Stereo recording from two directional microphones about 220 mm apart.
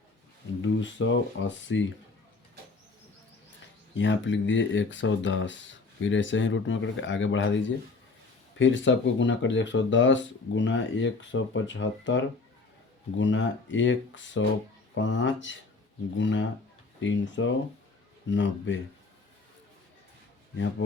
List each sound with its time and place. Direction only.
0.6 s speech: 55° left (ahead or behind)
3.9 s speech: 55° left (ahead or behind)